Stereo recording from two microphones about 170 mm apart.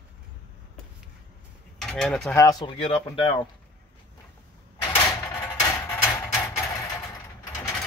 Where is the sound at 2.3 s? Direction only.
20° left (ahead or behind).